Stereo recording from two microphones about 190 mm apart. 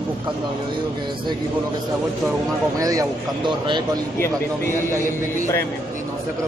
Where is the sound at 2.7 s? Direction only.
20° right (ahead or behind).